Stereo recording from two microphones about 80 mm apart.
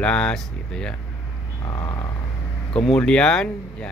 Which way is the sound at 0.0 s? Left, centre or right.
Centre.